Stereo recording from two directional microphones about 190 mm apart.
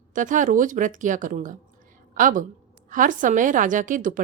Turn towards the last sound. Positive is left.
turn(degrees=-45)  # may be behind; listen again after turning